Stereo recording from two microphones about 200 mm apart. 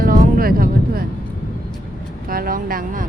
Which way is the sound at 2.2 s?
45° right (ahead or behind).